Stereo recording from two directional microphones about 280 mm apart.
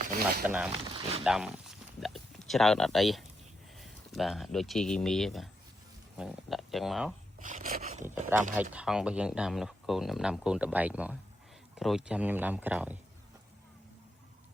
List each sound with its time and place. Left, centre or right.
0.0 s zipper: right
0.4 s speech: centre
1.2 s a sound: centre
3.8 s speech: centre
7.3 s a sound: right
8.3 s speech: centre